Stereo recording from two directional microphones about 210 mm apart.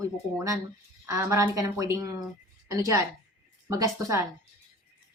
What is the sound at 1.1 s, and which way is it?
A woman's voice, 15° right (ahead or behind).